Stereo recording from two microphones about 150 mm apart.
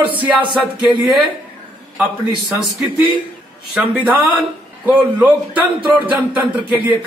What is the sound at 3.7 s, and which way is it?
Speech, 10° right (ahead or behind).